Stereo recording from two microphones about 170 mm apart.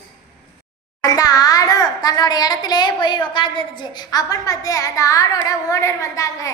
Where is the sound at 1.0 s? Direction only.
20° left (ahead or behind).